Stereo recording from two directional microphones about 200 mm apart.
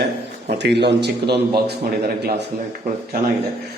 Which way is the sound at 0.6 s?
55° right (ahead or behind).